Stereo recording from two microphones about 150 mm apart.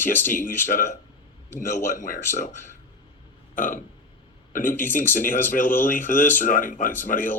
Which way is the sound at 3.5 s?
60° left (ahead or behind).